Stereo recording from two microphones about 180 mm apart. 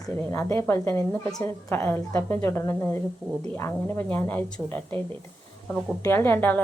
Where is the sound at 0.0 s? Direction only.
15° left (ahead or behind).